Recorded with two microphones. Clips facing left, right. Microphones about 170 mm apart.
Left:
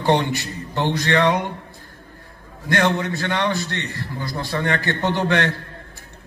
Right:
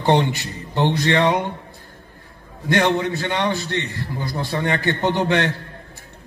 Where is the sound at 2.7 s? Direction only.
15° right (ahead or behind).